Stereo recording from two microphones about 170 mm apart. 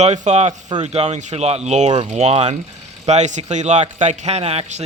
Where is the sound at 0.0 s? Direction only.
40° right (ahead or behind).